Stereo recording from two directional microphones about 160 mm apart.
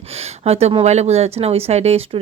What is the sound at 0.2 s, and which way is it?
Speech, 40° right (ahead or behind).